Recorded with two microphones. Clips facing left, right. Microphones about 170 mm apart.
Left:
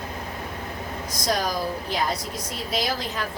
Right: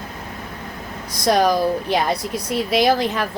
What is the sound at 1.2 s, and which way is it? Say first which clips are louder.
A woman's voice: right 9 dB; 65° right (ahead or behind).